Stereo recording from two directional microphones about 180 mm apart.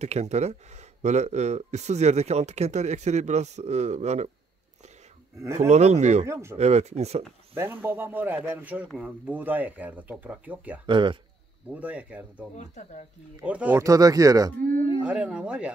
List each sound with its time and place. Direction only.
0.0 s speech: 40° right (ahead or behind)
5.4 s speech: 15° right (ahead or behind)
5.7 s speech: 40° right (ahead or behind)
6.2 s speech: 15° right (ahead or behind)
6.6 s speech: 35° right (ahead or behind)
7.5 s speech: 10° right (ahead or behind)
10.9 s speech: 25° right (ahead or behind)
11.7 s speech: 10° right (ahead or behind)
12.5 s speech: 40° left (ahead or behind)
13.4 s speech: 5° right (ahead or behind)
14.6 s speech: 50° right (ahead or behind)
15.0 s speech: 5° right (ahead or behind)